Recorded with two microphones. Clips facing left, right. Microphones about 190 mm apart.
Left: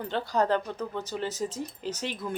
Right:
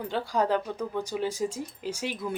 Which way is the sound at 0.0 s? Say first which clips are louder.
Even; 10° right (ahead or behind).